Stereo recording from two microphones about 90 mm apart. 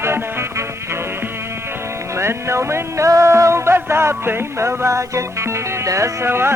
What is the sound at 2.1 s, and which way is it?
Music, 30° right (ahead or behind).